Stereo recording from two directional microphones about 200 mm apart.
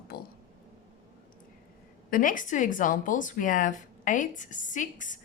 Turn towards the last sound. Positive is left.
turn(degrees=40)  # may be behind; listen again after turning